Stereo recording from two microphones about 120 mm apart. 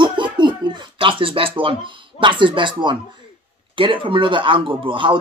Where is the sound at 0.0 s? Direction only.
40° right (ahead or behind).